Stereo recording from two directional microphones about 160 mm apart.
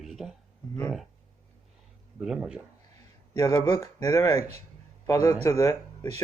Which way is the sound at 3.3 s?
20° left (ahead or behind).